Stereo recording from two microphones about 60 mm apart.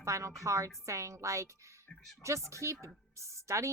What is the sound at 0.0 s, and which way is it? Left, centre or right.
A woman's voice, right.